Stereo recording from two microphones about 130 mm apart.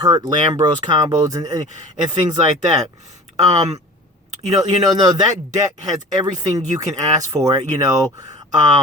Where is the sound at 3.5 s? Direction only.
30° right (ahead or behind).